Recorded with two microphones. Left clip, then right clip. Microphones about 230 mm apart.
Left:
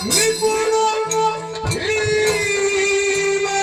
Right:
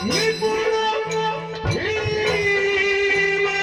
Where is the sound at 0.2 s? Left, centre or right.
Left.